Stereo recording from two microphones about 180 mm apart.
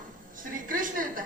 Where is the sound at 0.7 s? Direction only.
50° right (ahead or behind).